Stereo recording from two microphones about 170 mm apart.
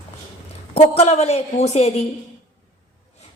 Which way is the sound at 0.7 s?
40° left (ahead or behind).